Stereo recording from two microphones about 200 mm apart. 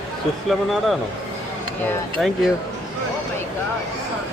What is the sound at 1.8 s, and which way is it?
Speech, centre (ahead or behind).